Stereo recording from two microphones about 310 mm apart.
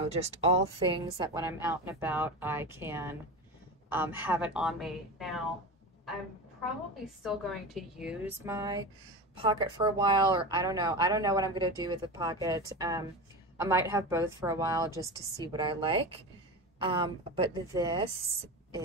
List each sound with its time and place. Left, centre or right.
0.0 s a woman's voice: centre
7.2 s a woman's voice: centre